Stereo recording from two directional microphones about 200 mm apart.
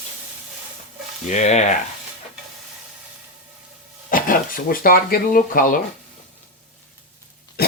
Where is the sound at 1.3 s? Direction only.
35° left (ahead or behind).